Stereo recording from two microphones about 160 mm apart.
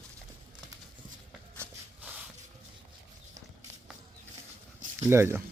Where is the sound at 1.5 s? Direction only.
10° right (ahead or behind).